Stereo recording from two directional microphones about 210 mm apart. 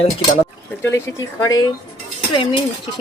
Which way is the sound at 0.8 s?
10° left (ahead or behind).